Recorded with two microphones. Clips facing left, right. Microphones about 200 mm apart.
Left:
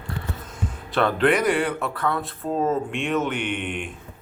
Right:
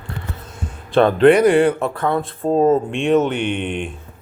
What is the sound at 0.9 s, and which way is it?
Speech, 25° right (ahead or behind).